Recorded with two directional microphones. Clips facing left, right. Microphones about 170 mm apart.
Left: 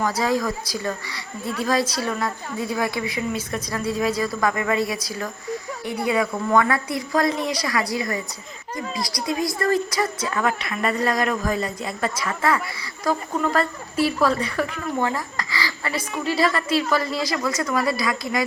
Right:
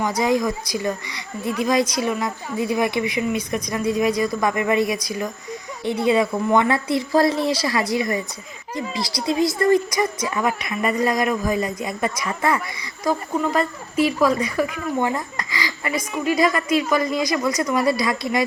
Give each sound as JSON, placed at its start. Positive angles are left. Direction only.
{"t": 0.0, "sound": "a woman's voice", "side_deg": -15}
{"t": 13.1, "sound": "a woman's voice", "side_deg": -10}